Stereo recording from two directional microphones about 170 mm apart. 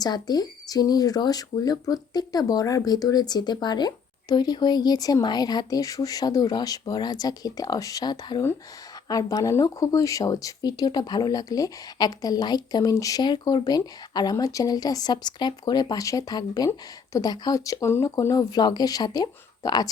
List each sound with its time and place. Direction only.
0.0 s speech: 25° left (ahead or behind)